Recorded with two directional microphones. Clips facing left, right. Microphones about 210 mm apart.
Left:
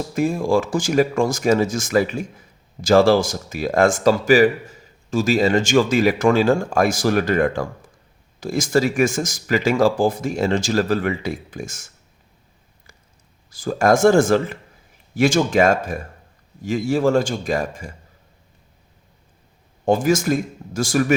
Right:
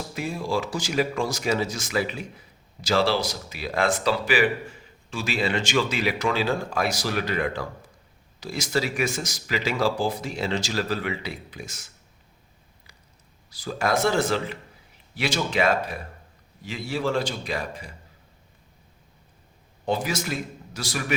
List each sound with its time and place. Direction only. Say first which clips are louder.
0.1 s a man's voice: left 10 dB; 50° left (ahead or behind)
13.5 s a man's voice: left 8 dB; 50° left (ahead or behind)
19.8 s a man's voice: left 9 dB; 45° left (ahead or behind)